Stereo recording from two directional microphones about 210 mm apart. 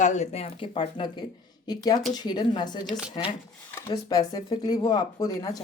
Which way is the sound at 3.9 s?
20° left (ahead or behind).